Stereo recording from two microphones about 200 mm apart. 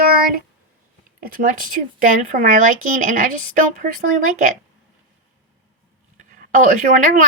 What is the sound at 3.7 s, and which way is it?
Speech, 45° right (ahead or behind).